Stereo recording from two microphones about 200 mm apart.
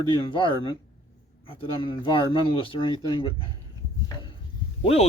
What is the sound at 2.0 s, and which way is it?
Speech, 25° left (ahead or behind).